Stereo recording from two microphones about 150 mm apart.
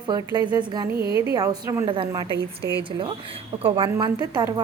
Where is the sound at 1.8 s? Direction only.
35° right (ahead or behind).